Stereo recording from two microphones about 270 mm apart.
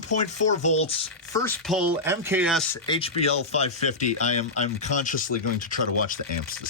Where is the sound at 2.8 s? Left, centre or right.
Centre.